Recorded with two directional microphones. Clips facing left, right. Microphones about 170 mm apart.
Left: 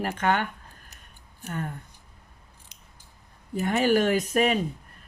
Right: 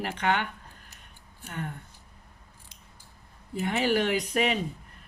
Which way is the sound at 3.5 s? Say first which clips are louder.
Left 4 dB; 45° left (ahead or behind).